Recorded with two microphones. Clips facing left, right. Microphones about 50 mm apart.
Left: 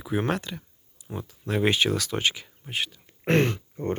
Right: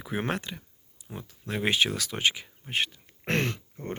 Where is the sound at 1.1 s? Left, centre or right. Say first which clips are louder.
Left 5 dB; centre.